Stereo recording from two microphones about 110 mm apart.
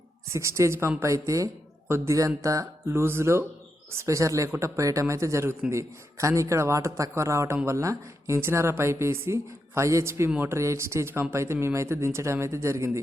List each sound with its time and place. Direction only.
0.3 s speech: 25° right (ahead or behind)